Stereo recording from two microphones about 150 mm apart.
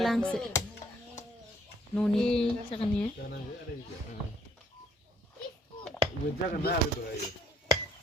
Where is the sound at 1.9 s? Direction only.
5° left (ahead or behind).